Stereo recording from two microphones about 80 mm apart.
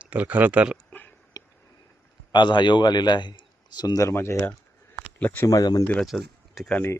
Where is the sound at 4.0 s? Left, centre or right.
Left.